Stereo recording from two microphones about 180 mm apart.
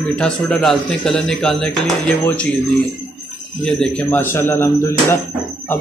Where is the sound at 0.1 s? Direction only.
5° left (ahead or behind).